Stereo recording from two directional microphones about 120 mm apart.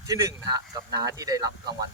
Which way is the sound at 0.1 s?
30° right (ahead or behind).